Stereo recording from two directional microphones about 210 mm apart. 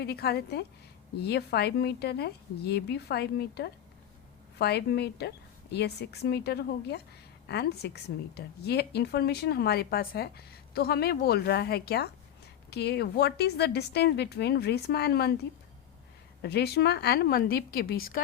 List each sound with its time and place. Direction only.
0.0 s a woman's voice: 50° left (ahead or behind)
16.4 s a woman's voice: 50° left (ahead or behind)